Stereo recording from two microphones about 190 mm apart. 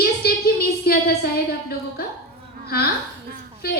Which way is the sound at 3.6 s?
55° left (ahead or behind).